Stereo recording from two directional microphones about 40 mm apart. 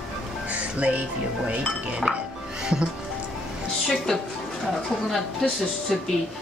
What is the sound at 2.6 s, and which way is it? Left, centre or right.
Music, centre.